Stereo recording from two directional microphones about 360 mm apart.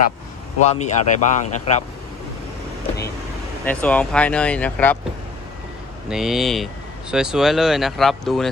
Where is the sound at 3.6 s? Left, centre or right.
Centre.